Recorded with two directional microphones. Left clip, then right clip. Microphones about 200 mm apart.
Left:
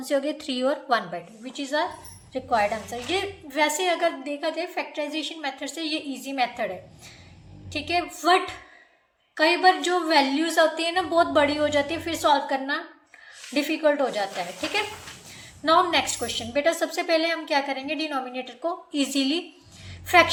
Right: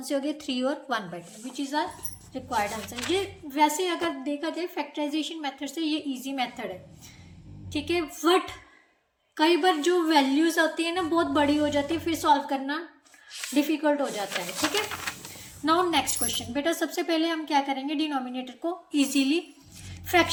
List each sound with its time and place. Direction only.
0.0 s a woman's voice: 20° right (ahead or behind)
7.7 s a woman's voice: 25° right (ahead or behind)
9.4 s a woman's voice: 25° right (ahead or behind)
15.6 s a woman's voice: 20° right (ahead or behind)